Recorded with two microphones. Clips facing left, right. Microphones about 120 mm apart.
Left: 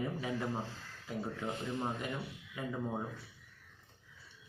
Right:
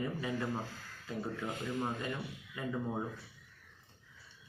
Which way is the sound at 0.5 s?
25° left (ahead or behind).